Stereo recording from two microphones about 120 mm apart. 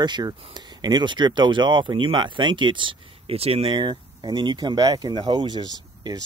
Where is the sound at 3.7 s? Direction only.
40° right (ahead or behind).